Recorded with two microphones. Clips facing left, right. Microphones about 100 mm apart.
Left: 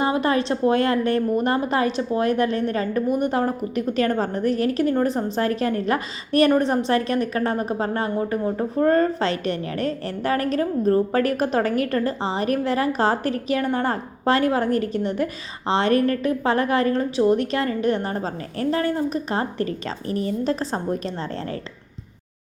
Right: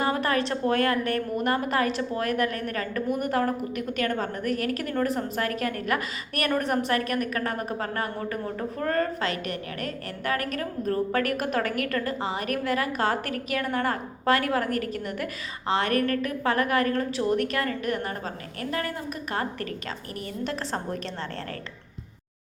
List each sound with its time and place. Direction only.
0.0 s a woman's voice: 20° left (ahead or behind)